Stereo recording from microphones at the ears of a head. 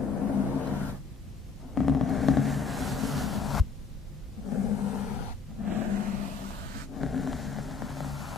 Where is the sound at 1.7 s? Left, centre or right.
Left.